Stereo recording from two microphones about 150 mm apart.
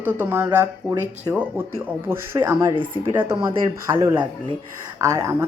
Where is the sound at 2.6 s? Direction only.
30° right (ahead or behind).